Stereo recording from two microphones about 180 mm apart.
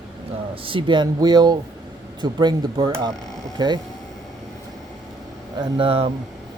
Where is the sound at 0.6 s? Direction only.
30° right (ahead or behind).